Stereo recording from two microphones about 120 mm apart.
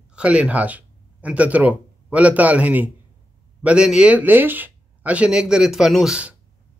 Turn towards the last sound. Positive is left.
turn(degrees=-5)  # may be behind; listen again after turning